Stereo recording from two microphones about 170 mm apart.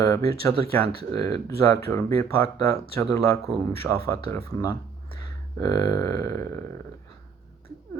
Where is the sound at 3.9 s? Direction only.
20° left (ahead or behind).